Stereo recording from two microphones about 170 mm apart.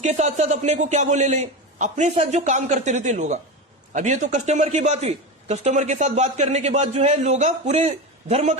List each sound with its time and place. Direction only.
0.0 s a man's voice: 45° right (ahead or behind)